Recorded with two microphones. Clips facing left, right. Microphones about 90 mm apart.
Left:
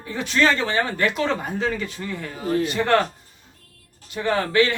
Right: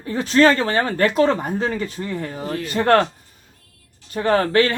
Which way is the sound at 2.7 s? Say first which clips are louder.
Right 5 dB; 40° right (ahead or behind).